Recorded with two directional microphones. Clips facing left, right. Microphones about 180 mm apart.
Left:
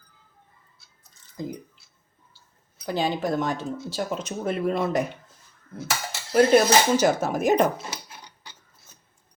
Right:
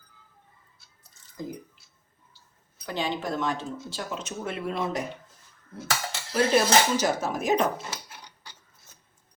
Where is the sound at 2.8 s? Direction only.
35° left (ahead or behind).